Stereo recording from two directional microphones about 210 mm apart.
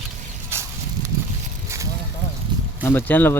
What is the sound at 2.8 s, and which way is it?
Speech, 10° left (ahead or behind).